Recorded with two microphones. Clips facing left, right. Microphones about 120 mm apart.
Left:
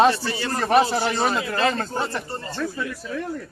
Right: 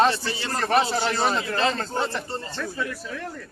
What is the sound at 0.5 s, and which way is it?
A man's voice, 10° left (ahead or behind).